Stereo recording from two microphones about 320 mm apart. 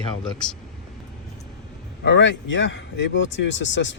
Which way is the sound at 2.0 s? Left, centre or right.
Left.